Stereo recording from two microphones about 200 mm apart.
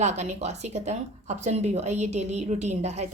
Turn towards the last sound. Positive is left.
turn(degrees=-35)  # may be behind; listen again after turning